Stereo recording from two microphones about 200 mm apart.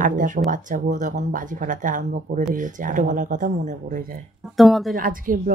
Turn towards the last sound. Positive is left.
turn(degrees=-45)  # may be behind; listen again after turning